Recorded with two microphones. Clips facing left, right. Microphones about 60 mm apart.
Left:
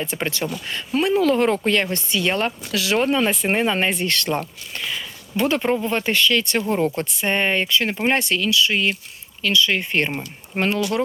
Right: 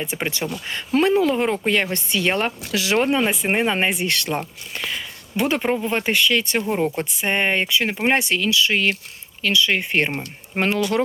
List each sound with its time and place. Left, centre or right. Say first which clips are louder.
0.0 s speech: left 1 dB; centre
0.7 s speech: right 4 dB; right
1.1 s speech: left 1 dB; centre; by 9.0 s right
9.4 s speech: even; right